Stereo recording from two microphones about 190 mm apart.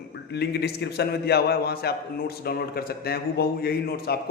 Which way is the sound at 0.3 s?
60° left (ahead or behind).